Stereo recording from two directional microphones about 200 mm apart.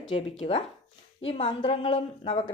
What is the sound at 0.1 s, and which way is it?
Speech, 25° left (ahead or behind).